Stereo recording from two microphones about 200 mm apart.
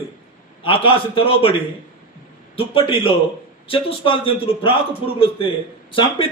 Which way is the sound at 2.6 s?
25° left (ahead or behind).